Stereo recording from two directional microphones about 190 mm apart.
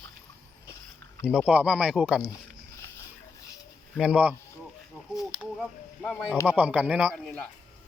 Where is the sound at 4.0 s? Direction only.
5° right (ahead or behind).